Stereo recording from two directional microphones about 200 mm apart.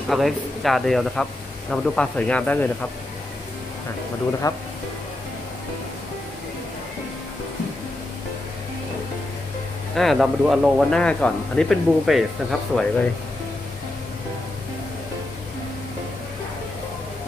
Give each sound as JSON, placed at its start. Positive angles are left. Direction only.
{"t": 0.1, "sound": "speech", "side_deg": 0}
{"t": 4.4, "sound": "speech", "side_deg": 15}
{"t": 9.9, "sound": "speech", "side_deg": 0}